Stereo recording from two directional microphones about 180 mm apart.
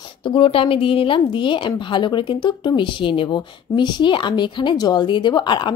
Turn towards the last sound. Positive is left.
turn(degrees=25)  # may be behind; listen again after turning